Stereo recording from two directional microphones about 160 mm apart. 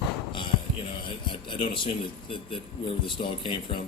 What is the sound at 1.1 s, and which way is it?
Speech, 30° left (ahead or behind).